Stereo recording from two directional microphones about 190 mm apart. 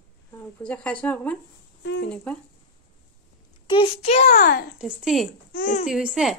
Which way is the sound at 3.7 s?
30° left (ahead or behind).